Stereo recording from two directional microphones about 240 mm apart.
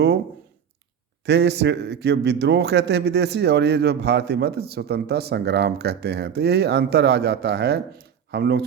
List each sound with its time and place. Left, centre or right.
1.2 s a man's voice: right